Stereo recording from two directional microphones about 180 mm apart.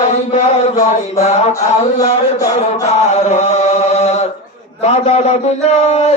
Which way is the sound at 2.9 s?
40° left (ahead or behind).